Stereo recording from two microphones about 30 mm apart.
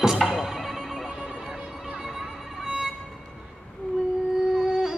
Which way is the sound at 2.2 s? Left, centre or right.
Right.